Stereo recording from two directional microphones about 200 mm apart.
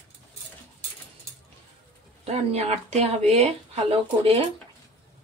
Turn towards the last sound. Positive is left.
turn(degrees=-30)  # may be behind; listen again after turning